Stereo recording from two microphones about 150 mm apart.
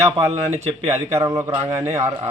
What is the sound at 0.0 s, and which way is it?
A man's voice, 45° right (ahead or behind).